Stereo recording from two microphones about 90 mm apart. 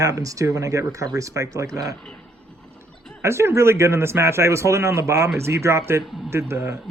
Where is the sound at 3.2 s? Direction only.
30° right (ahead or behind).